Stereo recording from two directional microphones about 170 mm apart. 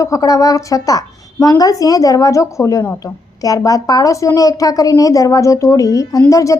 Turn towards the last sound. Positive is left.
turn(degrees=20)  # may be behind; listen again after turning